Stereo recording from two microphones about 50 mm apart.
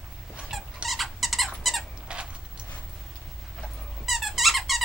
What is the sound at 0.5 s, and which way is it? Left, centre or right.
Squeak, centre.